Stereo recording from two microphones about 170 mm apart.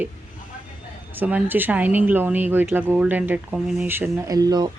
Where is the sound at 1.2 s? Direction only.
10° right (ahead or behind).